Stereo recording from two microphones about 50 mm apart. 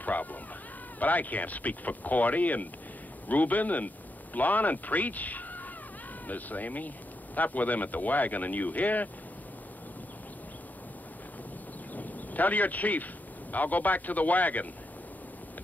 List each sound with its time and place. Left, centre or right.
0.0 s a sound: left
0.9 s speech: left
11.9 s speech: left